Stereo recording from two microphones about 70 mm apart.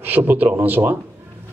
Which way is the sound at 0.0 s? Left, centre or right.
Right.